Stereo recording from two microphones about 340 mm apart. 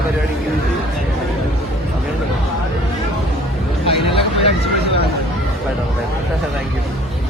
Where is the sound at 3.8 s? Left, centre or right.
Centre.